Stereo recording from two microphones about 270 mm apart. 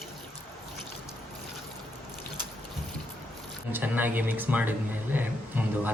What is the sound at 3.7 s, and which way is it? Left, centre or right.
Speech, centre.